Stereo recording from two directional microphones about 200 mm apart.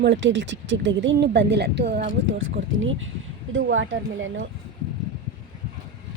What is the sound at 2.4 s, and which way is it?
A woman's voice, 75° right (ahead or behind).